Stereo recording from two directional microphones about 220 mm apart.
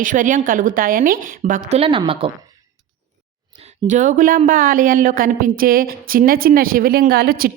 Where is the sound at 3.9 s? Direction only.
35° right (ahead or behind).